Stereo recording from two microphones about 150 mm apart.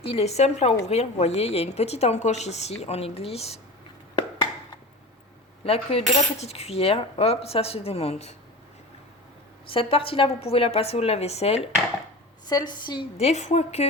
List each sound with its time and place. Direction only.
0.0 s a woman's voice: 40° left (ahead or behind)
5.6 s a woman's voice: 40° left (ahead or behind)
9.6 s a woman's voice: 40° left (ahead or behind)
12.5 s a woman's voice: 25° left (ahead or behind)
13.1 s a woman's voice: 45° left (ahead or behind)